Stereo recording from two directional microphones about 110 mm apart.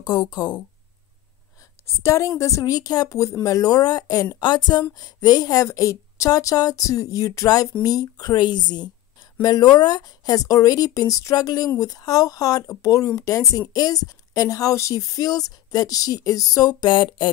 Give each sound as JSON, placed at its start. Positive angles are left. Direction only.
{"t": 0.0, "sound": "speech", "side_deg": 40}
{"t": 1.6, "sound": "a woman's voice", "side_deg": 25}